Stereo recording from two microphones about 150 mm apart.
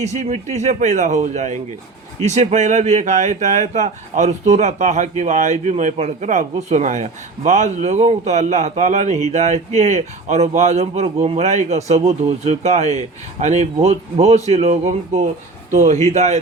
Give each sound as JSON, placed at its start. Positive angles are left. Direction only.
{"t": 0.0, "sound": "speech", "side_deg": -50}